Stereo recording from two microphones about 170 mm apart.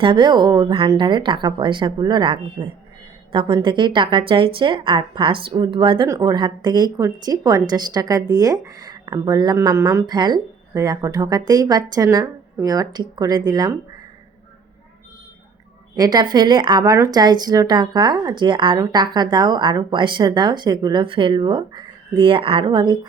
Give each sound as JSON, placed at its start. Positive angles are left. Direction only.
{"t": 0.0, "sound": "speech", "side_deg": -30}
{"t": 16.0, "sound": "speech", "side_deg": -25}